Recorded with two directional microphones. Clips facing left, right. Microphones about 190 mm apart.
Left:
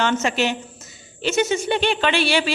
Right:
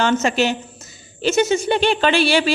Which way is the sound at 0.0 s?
40° right (ahead or behind).